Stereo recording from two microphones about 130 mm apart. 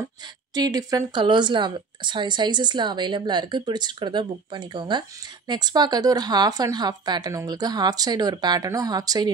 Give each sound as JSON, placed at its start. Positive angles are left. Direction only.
{"t": 0.6, "sound": "speech", "side_deg": -30}